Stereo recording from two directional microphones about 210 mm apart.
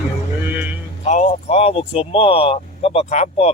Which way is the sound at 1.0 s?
35° left (ahead or behind).